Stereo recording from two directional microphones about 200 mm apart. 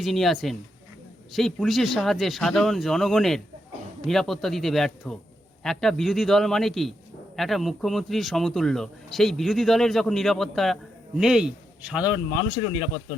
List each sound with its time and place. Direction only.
0.0 s a man's voice: centre (ahead or behind)
12.0 s speech: 20° left (ahead or behind)